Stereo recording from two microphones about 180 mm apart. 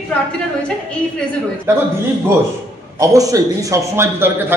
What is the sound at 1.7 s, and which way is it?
Speech, 15° right (ahead or behind).